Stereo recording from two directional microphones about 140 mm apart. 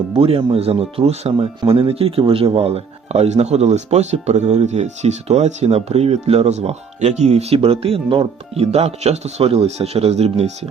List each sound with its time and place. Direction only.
0.1 s speech: 45° right (ahead or behind)